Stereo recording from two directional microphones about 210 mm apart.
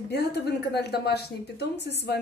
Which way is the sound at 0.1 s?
50° left (ahead or behind).